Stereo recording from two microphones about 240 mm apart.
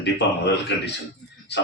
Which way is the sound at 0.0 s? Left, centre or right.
Left.